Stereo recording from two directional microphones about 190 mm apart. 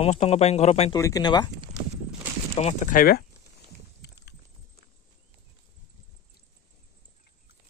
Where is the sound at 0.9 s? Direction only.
20° left (ahead or behind).